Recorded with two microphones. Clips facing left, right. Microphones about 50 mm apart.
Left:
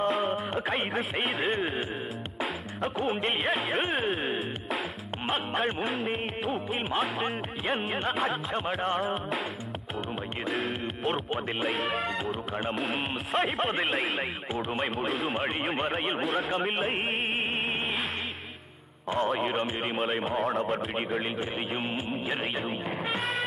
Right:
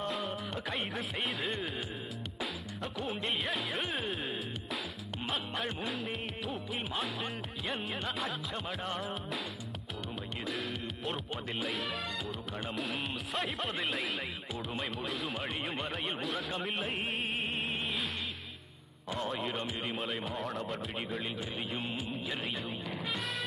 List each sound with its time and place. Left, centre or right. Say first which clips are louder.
0.0 s music: left 9 dB; left
0.7 s speech: left 5 dB; left
2.4 s music: left 8 dB; left
3.2 s speech: left 6 dB; left
5.2 s speech: left 7 dB; left
10.4 s speech: left 7 dB; left
15.7 s speech: left 7 dB; left
19.0 s speech: left 8 dB; left
20.1 s speech: left 8 dB; left
21.2 s speech: left 6 dB; left